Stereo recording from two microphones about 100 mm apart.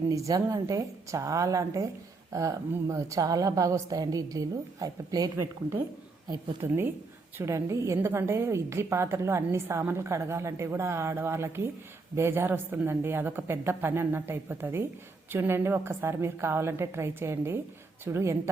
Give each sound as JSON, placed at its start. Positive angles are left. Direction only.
{"t": 0.1, "sound": "a woman's voice", "side_deg": -35}
{"t": 6.6, "sound": "a woman's voice", "side_deg": -25}